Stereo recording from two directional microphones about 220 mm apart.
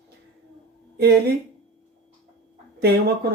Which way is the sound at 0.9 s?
45° right (ahead or behind).